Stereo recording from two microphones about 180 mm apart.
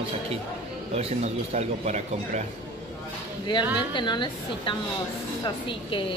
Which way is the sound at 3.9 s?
25° left (ahead or behind).